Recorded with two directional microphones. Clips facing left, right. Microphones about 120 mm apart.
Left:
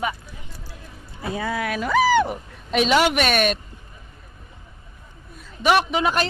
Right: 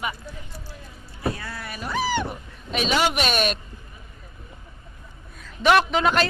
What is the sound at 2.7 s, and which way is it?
Speech, 65° left (ahead or behind).